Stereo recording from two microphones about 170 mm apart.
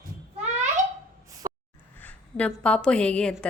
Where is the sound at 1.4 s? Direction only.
20° right (ahead or behind).